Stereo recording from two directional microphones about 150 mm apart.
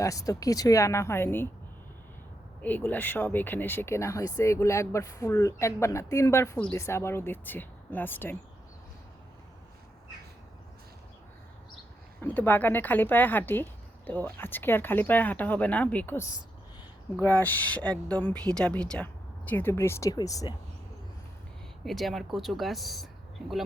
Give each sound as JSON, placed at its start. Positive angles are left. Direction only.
{"t": 0.0, "sound": "speech", "side_deg": 25}
{"t": 2.6, "sound": "speech", "side_deg": 10}
{"t": 12.2, "sound": "speech", "side_deg": 15}
{"t": 17.2, "sound": "speech", "side_deg": 10}
{"t": 21.8, "sound": "speech", "side_deg": 0}